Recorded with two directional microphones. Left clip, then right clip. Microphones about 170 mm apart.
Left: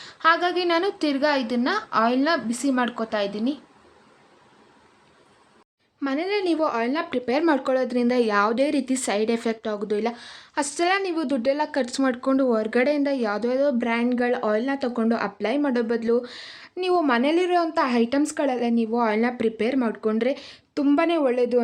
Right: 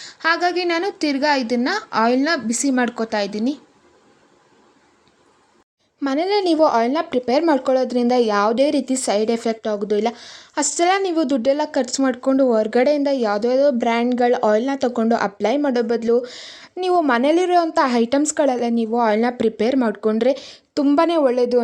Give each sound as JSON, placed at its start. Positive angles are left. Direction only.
{"t": 0.0, "sound": "a woman's voice", "side_deg": -20}
{"t": 6.1, "sound": "a woman's voice", "side_deg": -25}